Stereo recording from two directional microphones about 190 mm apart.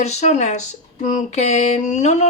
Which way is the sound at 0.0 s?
35° left (ahead or behind).